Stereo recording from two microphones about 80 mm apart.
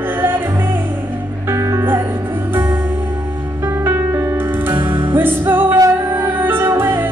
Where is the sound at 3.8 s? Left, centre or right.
Right.